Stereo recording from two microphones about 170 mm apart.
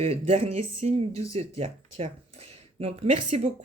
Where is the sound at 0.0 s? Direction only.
40° right (ahead or behind).